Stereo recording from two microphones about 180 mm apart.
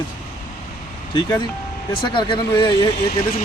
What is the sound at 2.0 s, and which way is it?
Speech, 25° left (ahead or behind).